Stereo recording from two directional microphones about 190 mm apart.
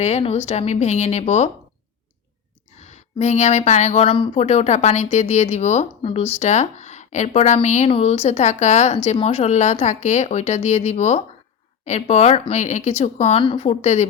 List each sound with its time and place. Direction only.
0.0 s speech: 35° left (ahead or behind)
2.8 s speech: 35° left (ahead or behind)